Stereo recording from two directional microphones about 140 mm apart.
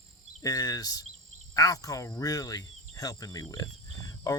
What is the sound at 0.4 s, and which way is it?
Speech, 25° left (ahead or behind).